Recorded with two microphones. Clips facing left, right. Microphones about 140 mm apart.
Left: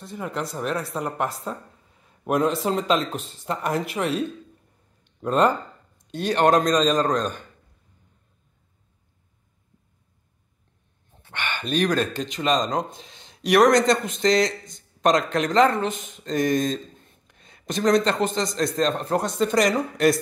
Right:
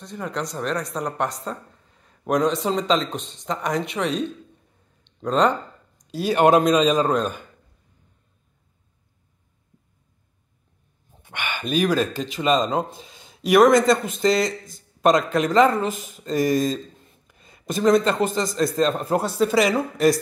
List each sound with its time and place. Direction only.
0.0 s a man's voice: 5° left (ahead or behind)
11.2 s a sound: 10° right (ahead or behind)
11.7 s speech: 5° right (ahead or behind)